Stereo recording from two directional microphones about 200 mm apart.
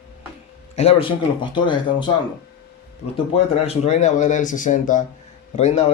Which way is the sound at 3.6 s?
35° left (ahead or behind).